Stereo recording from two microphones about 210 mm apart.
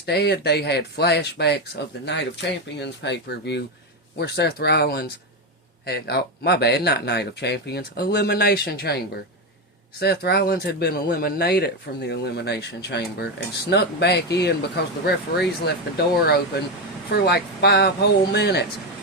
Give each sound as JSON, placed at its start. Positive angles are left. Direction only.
{"t": 0.0, "sound": "speech", "side_deg": 50}
{"t": 10.0, "sound": "speech", "side_deg": 50}